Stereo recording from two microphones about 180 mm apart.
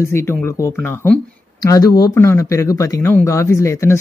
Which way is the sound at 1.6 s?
20° left (ahead or behind).